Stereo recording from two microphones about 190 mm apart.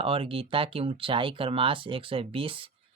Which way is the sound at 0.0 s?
30° right (ahead or behind).